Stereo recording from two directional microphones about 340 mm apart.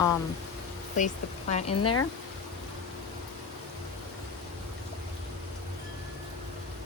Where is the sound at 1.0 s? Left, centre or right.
Left.